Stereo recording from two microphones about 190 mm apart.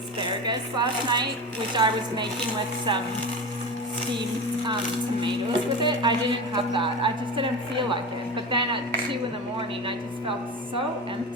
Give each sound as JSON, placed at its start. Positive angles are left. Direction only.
{"t": 0.4, "sound": "speech", "side_deg": -25}
{"t": 5.2, "sound": "speech", "side_deg": -25}
{"t": 8.4, "sound": "speech", "side_deg": -25}